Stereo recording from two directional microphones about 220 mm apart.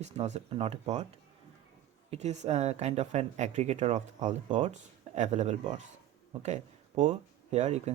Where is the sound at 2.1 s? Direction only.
30° right (ahead or behind).